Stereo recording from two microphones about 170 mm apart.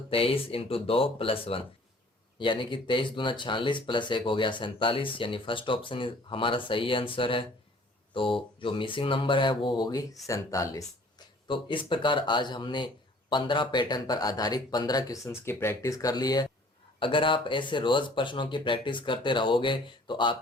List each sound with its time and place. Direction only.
0.1 s speech: 35° left (ahead or behind)
11.4 s speech: 30° left (ahead or behind)